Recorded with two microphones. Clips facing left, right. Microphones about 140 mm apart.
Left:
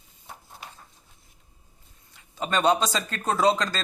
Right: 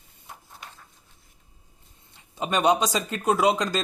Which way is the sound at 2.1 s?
15° right (ahead or behind).